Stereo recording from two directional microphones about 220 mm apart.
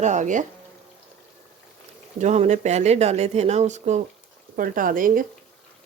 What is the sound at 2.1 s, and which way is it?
Speech, 35° right (ahead or behind).